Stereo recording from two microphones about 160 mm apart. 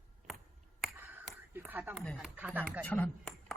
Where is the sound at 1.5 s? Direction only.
10° right (ahead or behind).